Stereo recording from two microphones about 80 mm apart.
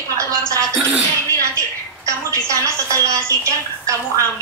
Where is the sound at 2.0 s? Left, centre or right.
Right.